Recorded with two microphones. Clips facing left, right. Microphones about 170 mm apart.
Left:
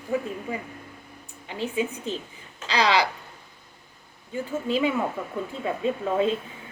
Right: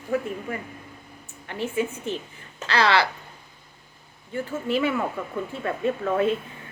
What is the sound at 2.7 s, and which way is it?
Speech, 15° left (ahead or behind).